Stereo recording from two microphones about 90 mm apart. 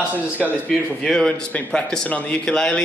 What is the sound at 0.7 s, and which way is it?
Speech, 5° left (ahead or behind).